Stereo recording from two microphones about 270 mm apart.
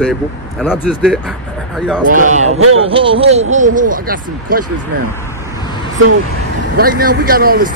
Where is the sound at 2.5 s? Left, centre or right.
Right.